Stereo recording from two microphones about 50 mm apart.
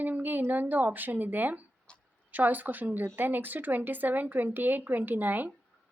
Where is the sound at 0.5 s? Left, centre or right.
Right.